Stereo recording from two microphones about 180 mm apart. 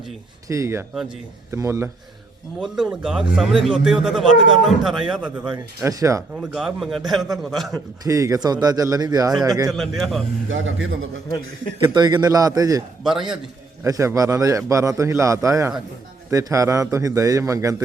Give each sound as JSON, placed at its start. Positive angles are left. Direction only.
{"t": 0.4, "sound": "a man's voice", "side_deg": -15}
{"t": 2.6, "sound": "a man's voice", "side_deg": -5}
{"t": 5.8, "sound": "a man's voice", "side_deg": -15}
{"t": 6.3, "sound": "a man's voice", "side_deg": -5}
{"t": 7.7, "sound": "a man's voice", "side_deg": -20}
{"t": 9.6, "sound": "a man's voice", "side_deg": 0}
{"t": 10.5, "sound": "a man's voice", "side_deg": -90}
{"t": 11.9, "sound": "speech", "side_deg": -20}
{"t": 13.0, "sound": "a man's voice", "side_deg": 0}
{"t": 13.8, "sound": "a man's voice", "side_deg": -15}